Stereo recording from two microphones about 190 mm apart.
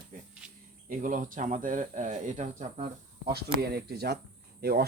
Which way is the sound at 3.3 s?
55° right (ahead or behind).